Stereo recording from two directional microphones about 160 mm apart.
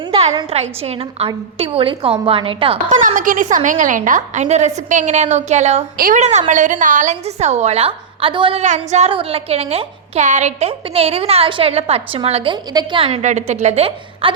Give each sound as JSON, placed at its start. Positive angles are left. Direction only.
{"t": 0.1, "sound": "a sound", "side_deg": -40}
{"t": 0.5, "sound": "a woman's voice", "side_deg": -40}
{"t": 3.2, "sound": "a woman's voice", "side_deg": -55}
{"t": 8.6, "sound": "a woman's voice", "side_deg": -45}
{"t": 13.1, "sound": "a woman's voice", "side_deg": -45}